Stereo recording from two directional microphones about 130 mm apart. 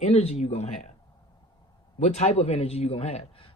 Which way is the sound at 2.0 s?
60° left (ahead or behind).